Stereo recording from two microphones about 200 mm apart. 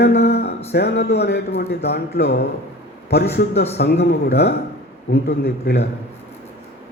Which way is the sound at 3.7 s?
55° left (ahead or behind).